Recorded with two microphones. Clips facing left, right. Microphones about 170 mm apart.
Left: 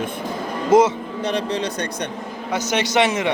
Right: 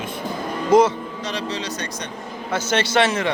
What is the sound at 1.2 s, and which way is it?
Speech, 55° left (ahead or behind).